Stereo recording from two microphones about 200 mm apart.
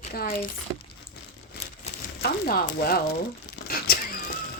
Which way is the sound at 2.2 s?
50° left (ahead or behind).